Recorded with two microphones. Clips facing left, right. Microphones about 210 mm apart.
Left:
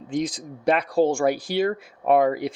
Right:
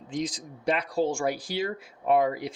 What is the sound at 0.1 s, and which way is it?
Speech, 55° left (ahead or behind).